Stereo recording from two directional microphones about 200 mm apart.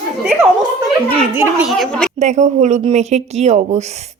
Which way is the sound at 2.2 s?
35° right (ahead or behind).